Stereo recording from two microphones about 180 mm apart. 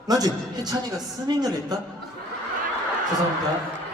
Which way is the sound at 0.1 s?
20° right (ahead or behind).